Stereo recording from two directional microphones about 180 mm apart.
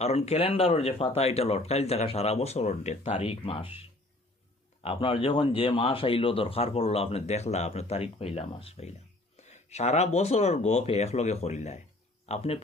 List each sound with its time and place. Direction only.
0.0 s speech: 35° left (ahead or behind)
4.8 s speech: 30° left (ahead or behind)